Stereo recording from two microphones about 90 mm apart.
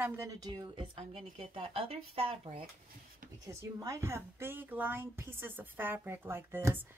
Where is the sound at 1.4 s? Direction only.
80° right.